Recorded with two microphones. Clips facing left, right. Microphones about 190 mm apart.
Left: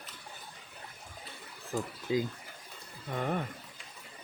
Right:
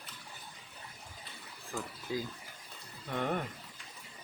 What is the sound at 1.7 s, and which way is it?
Speech, 20° left (ahead or behind).